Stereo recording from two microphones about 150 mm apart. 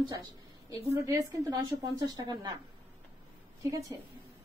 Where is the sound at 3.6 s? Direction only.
20° right (ahead or behind).